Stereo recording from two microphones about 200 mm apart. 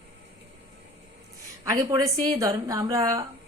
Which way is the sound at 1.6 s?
15° right (ahead or behind).